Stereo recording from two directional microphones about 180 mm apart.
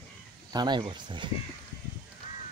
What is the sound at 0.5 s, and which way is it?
Speech, 25° right (ahead or behind).